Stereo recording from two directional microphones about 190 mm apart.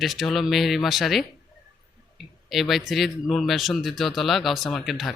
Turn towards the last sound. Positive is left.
turn(degrees=0)  # may be behind; listen again after turning